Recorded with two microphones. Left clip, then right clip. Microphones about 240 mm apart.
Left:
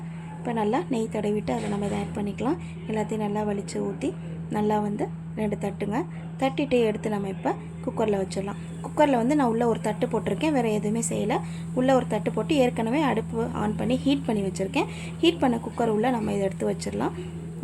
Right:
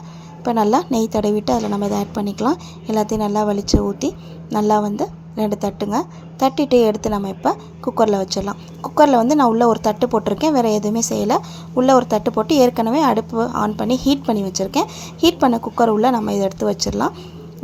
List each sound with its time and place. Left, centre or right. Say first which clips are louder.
0.4 s speech: right 10 dB; right